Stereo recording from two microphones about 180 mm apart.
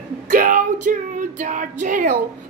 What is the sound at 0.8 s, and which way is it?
Music, 45° right (ahead or behind).